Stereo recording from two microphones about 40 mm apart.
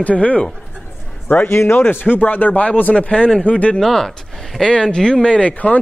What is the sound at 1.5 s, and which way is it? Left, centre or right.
Speech, left.